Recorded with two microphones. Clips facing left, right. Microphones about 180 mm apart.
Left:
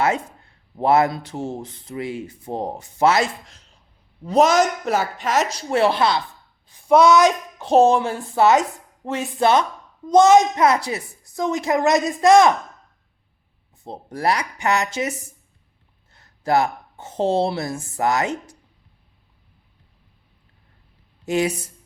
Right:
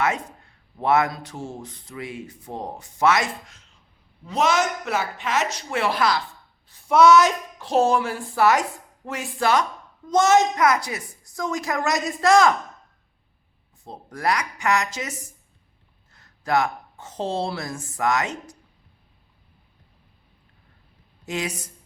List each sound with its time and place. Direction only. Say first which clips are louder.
0.8 s a woman's voice: left 4 dB; 30° left (ahead or behind)
10.6 s speech: left 3 dB; 30° left (ahead or behind)
13.8 s speech: left 3 dB; 30° left (ahead or behind)
16.1 s a woman's voice: left 3 dB; 30° left (ahead or behind)
21.2 s speech: left 8 dB; 30° left (ahead or behind)